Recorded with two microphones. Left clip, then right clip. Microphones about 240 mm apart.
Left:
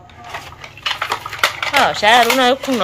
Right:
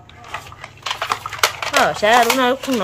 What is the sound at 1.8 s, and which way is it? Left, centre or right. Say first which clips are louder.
Speech: left 2 dB; centre.